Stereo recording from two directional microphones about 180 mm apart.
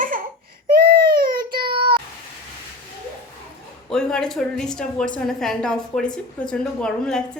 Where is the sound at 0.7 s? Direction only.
55° right (ahead or behind).